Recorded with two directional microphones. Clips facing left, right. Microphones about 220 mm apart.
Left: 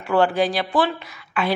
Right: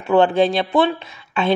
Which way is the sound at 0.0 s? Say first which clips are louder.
Right 4 dB; 20° right (ahead or behind).